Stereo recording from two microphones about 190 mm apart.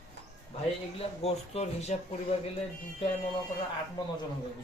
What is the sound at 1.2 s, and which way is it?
Speech, 35° left (ahead or behind).